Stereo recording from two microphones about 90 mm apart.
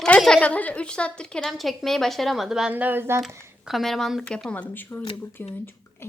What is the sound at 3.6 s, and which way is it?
Speech, centre (ahead or behind).